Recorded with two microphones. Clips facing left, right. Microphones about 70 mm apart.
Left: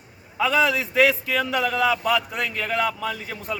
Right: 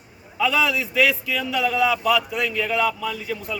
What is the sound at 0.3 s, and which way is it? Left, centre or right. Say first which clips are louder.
A man's voice: left 1 dB; left.